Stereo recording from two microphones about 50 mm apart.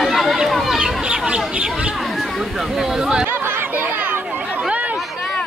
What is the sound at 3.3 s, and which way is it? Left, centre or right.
Chatter, right.